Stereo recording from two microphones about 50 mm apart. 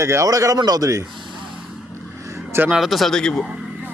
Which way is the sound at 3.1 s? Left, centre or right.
Centre.